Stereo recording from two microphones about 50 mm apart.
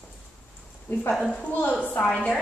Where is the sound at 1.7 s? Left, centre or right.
Left.